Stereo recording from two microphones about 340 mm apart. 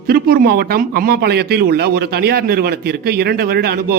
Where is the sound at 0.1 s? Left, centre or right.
Right.